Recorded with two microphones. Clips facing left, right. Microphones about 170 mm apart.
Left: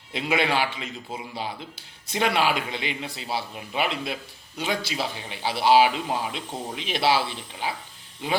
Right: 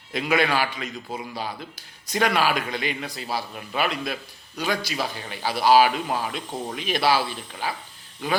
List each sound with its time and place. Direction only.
0.1 s a man's voice: 25° left (ahead or behind)